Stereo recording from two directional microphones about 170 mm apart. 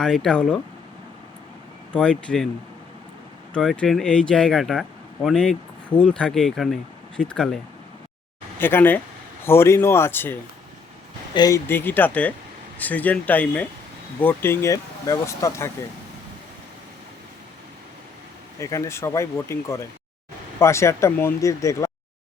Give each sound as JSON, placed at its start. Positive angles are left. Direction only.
{"t": 0.0, "sound": "speech", "side_deg": 5}
{"t": 1.9, "sound": "speech", "side_deg": 5}
{"t": 3.5, "sound": "speech", "side_deg": 5}
{"t": 11.3, "sound": "speech", "side_deg": 20}
{"t": 18.6, "sound": "speech", "side_deg": 15}